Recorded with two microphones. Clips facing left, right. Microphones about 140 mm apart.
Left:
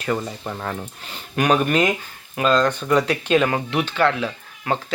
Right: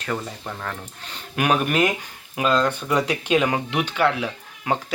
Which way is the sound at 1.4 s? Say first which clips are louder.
Left 2 dB; 5° right (ahead or behind).